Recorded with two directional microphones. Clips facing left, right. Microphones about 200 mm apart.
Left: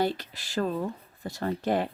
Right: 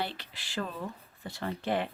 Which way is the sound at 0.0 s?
45° left (ahead or behind).